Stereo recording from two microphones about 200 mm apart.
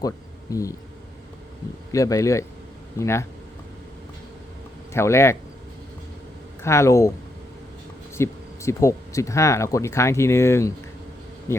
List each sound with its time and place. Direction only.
0.5 s speech: 15° left (ahead or behind)
1.9 s speech: 15° left (ahead or behind)
4.9 s speech: 15° left (ahead or behind)
6.6 s speech: 15° left (ahead or behind)
8.1 s speech: 15° left (ahead or behind)